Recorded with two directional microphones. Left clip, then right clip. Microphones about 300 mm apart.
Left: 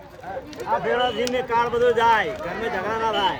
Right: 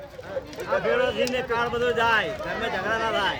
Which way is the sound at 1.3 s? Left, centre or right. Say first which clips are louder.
Left 4 dB; centre.